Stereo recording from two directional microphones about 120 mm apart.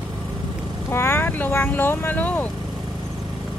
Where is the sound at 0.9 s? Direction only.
20° left (ahead or behind).